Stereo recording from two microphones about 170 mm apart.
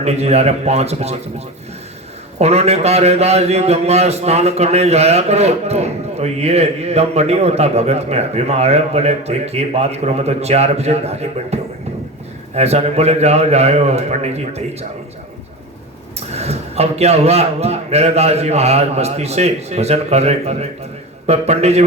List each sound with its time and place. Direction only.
0.0 s speech: 40° right (ahead or behind)
2.4 s speech: 40° right (ahead or behind)
16.3 s speech: 40° right (ahead or behind)